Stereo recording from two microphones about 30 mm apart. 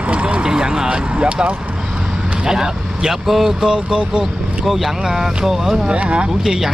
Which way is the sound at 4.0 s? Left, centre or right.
Right.